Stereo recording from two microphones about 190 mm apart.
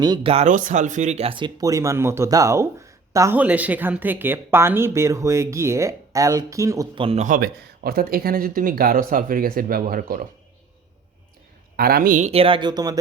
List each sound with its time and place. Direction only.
0.0 s speech: 25° right (ahead or behind)
6.9 s speech: 30° right (ahead or behind)
7.3 s speech: 50° right (ahead or behind)
11.8 s speech: 50° right (ahead or behind); by 13.0 s 20° right (ahead or behind)